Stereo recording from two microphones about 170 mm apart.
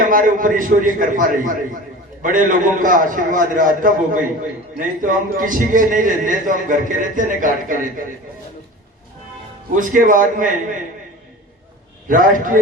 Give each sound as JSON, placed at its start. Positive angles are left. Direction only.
{"t": 0.0, "sound": "a man's voice", "side_deg": -50}
{"t": 9.7, "sound": "a man's voice", "side_deg": -50}
{"t": 12.0, "sound": "a man's voice", "side_deg": -50}